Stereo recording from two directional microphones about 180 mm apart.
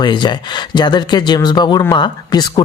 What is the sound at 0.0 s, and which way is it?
Speech, 25° left (ahead or behind).